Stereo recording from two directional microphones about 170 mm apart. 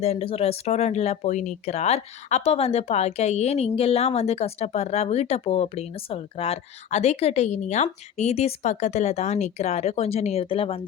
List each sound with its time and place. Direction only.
0.0 s speech: 35° left (ahead or behind)